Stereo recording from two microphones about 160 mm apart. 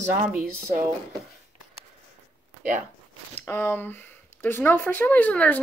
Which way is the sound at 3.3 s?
15° left (ahead or behind).